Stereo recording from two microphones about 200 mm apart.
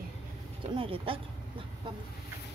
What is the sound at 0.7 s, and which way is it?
Speech, 25° right (ahead or behind).